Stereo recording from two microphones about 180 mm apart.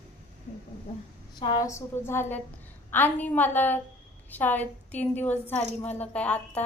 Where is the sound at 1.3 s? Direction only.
25° left (ahead or behind); by 6.6 s 10° left (ahead or behind).